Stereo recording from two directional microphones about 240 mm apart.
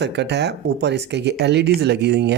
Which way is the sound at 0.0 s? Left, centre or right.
Right.